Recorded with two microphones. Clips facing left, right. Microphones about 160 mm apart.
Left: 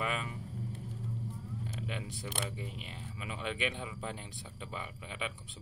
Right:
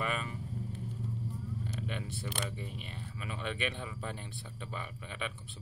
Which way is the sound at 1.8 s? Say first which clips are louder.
Right 1 dB; 10° left (ahead or behind).